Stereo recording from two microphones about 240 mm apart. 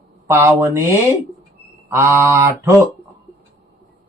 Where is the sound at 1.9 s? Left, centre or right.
Centre.